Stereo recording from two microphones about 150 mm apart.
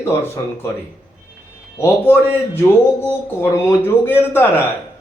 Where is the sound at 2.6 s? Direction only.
15° left (ahead or behind).